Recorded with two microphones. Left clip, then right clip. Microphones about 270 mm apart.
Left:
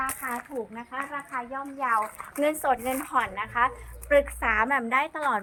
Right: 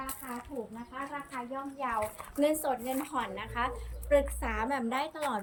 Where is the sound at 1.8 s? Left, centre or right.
Centre.